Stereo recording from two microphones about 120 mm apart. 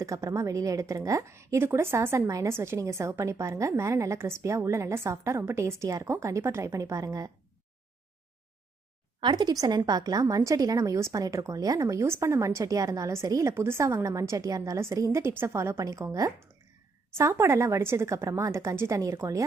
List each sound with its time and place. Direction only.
0.0 s a woman's voice: 25° right (ahead or behind)
9.2 s a woman's voice: 35° right (ahead or behind)